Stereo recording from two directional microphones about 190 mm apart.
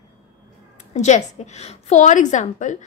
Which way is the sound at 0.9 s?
35° left (ahead or behind).